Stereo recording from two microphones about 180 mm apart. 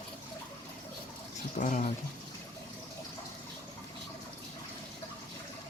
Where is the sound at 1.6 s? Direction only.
45° left (ahead or behind).